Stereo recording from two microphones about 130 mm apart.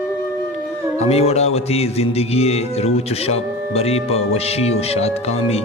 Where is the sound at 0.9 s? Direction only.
55° left (ahead or behind).